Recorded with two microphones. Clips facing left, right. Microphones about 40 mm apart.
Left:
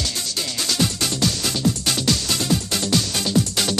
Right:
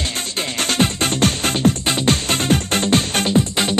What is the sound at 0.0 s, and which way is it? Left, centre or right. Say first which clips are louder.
Music: right 3 dB; right.